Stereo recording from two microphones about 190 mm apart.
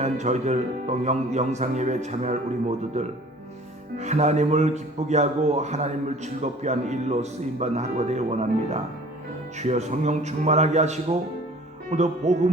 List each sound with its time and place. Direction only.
0.0 s speech: 35° right (ahead or behind)